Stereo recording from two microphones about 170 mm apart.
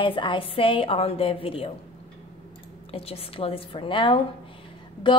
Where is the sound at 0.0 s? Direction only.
30° left (ahead or behind).